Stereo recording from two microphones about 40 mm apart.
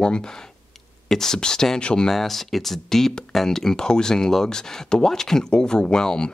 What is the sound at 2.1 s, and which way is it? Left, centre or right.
Speech, centre.